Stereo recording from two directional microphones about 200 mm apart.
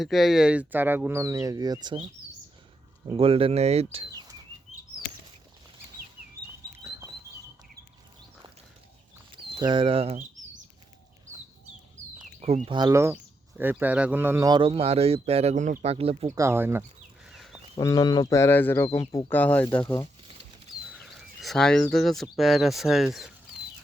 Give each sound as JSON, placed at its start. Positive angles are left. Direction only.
{"t": 0.0, "sound": "speech", "side_deg": 0}
{"t": 3.1, "sound": "speech", "side_deg": -30}
{"t": 9.6, "sound": "speech", "side_deg": -25}
{"t": 12.2, "sound": "a sound", "side_deg": -30}
{"t": 12.6, "sound": "speech", "side_deg": -20}
{"t": 16.3, "sound": "speech", "side_deg": -15}
{"t": 17.2, "sound": "a sound", "side_deg": 0}
{"t": 17.7, "sound": "speech", "side_deg": 15}
{"t": 21.0, "sound": "speech", "side_deg": 0}